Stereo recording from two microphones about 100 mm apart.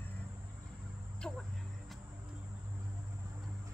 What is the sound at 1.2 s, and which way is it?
Speech, 10° left (ahead or behind).